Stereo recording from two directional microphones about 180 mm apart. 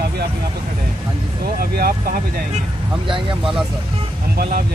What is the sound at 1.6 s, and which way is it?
Speech, 55° right (ahead or behind).